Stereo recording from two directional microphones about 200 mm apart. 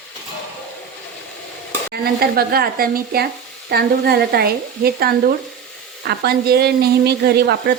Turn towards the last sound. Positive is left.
turn(degrees=-55)  # may be behind; listen again after turning